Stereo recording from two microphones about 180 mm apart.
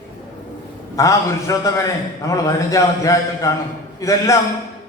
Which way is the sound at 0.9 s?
20° left (ahead or behind).